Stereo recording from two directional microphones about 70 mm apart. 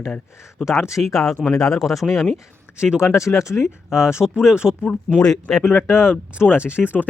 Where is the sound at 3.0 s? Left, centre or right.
Left.